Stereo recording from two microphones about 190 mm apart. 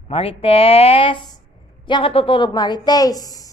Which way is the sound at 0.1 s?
30° left (ahead or behind).